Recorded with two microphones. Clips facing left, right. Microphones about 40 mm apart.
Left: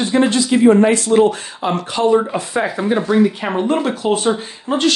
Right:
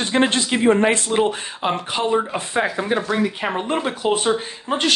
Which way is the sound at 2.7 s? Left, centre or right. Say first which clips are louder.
Left 5 dB; centre.